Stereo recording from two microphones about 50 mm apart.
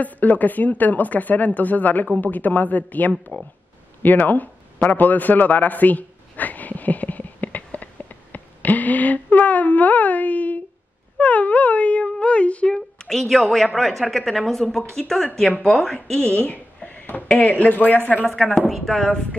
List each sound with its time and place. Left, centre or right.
0.0 s speech: left
4.0 s a sound: left
13.0 s speech: centre
16.2 s a sound: left
17.5 s speech: left
18.7 s speech: centre